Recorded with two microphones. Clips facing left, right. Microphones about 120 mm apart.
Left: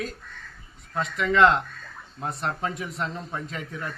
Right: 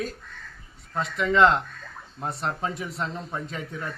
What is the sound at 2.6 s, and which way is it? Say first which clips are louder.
Speech: even; 30° right (ahead or behind).